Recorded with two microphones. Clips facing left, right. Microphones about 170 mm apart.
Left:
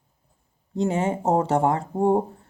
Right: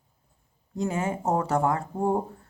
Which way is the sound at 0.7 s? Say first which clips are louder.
Left 5 dB; 25° left (ahead or behind).